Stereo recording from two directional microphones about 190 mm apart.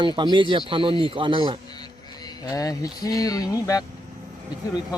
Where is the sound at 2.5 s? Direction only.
20° left (ahead or behind).